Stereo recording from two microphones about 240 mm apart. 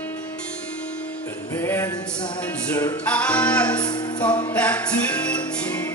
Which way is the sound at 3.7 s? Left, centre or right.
Centre.